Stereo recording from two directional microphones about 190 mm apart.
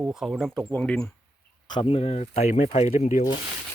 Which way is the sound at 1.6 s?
25° left (ahead or behind).